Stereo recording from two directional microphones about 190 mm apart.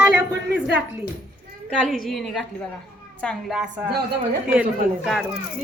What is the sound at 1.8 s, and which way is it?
Speech, centre (ahead or behind).